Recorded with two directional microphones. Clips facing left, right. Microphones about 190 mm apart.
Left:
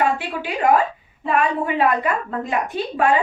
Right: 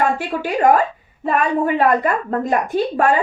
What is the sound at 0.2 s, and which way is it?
A woman's voice, 45° right (ahead or behind).